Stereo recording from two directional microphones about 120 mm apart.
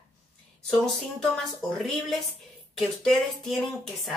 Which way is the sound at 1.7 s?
5° left (ahead or behind).